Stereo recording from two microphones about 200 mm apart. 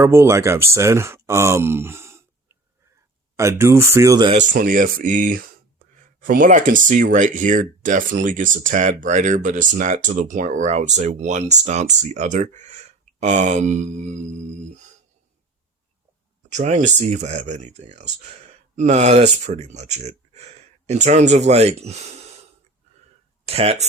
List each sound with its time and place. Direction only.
0.0 s speech: 15° right (ahead or behind)
3.3 s speech: 15° right (ahead or behind)
4.4 s speech: 45° right (ahead or behind)
16.5 s speech: 35° right (ahead or behind)
23.5 s speech: 30° right (ahead or behind)